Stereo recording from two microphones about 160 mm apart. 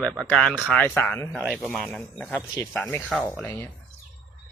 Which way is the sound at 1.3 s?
5° right (ahead or behind).